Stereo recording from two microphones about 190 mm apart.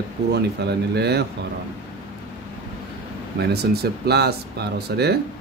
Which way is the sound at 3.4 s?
55° right (ahead or behind).